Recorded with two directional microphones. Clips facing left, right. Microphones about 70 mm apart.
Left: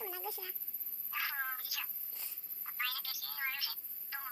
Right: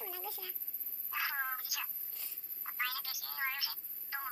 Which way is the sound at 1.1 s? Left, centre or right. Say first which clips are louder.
Right 2 dB; centre.